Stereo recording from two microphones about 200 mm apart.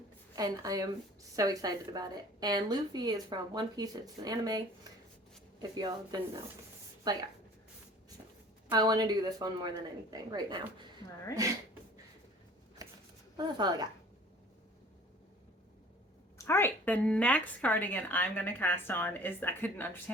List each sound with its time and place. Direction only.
0.3 s a woman's voice: 20° right (ahead or behind)
8.7 s a woman's voice: 20° right (ahead or behind)
13.3 s a woman's voice: 20° right (ahead or behind)
16.4 s a woman's voice: 10° left (ahead or behind)